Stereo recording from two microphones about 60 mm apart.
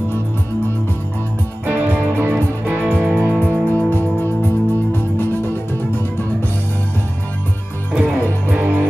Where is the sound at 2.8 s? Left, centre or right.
Centre.